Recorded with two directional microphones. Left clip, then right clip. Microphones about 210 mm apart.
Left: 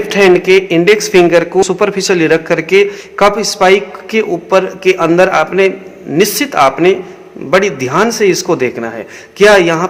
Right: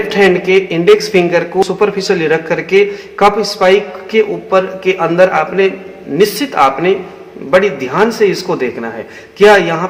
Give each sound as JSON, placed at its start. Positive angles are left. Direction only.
{"t": 0.1, "sound": "speech", "side_deg": 50}